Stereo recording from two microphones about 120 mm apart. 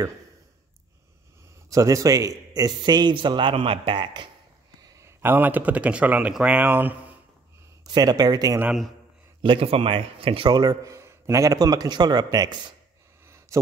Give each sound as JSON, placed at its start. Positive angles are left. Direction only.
{"t": 1.7, "sound": "a man's voice", "side_deg": -25}
{"t": 4.8, "sound": "speech", "side_deg": -25}
{"t": 7.8, "sound": "a man's voice", "side_deg": -35}
{"t": 9.4, "sound": "speech", "side_deg": -50}
{"t": 10.5, "sound": "a man's voice", "side_deg": -35}
{"t": 13.5, "sound": "a sound", "side_deg": -25}